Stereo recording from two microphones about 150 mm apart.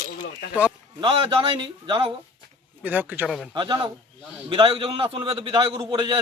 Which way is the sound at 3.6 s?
30° right (ahead or behind).